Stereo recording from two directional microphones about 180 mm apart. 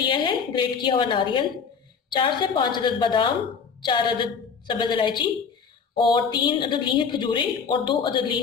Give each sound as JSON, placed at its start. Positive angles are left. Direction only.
{"t": 0.0, "sound": "a woman's voice", "side_deg": 25}